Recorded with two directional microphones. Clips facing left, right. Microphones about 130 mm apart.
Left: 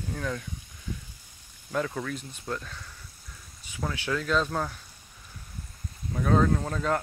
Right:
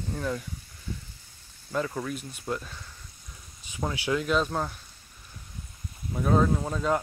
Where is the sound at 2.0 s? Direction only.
15° right (ahead or behind).